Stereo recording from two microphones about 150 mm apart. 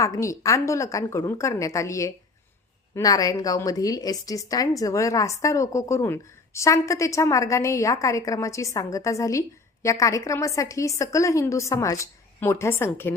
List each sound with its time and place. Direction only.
0.0 s a woman's voice: 20° left (ahead or behind)